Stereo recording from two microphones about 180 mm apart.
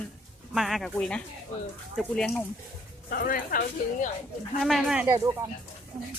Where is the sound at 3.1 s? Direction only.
55° left (ahead or behind).